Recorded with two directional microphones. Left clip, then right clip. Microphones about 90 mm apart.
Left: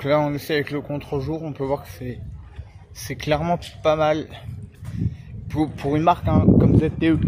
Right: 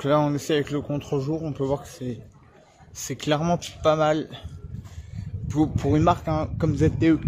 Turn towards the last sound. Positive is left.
turn(degrees=-45)  # may be behind; listen again after turning